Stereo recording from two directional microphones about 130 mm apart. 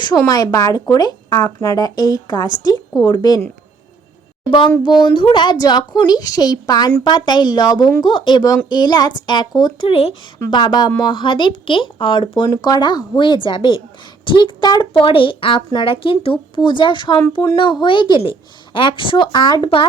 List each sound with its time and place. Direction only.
0.2 s speech: 25° left (ahead or behind)
4.8 s speech: 35° left (ahead or behind)
10.5 s speech: 35° left (ahead or behind)